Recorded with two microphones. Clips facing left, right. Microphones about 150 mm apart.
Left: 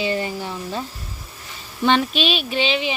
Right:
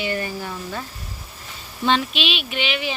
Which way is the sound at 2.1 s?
40° left (ahead or behind).